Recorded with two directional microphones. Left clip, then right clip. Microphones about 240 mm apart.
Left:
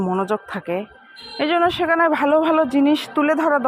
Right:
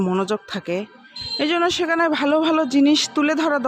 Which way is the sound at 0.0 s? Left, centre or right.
Right.